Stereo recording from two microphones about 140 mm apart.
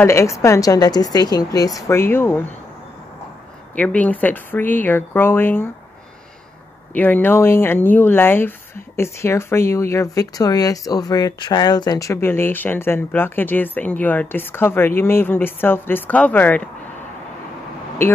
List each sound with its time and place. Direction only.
0.0 s a woman's voice: 20° left (ahead or behind)
3.7 s speech: 10° left (ahead or behind)
6.9 s speech: 10° left (ahead or behind)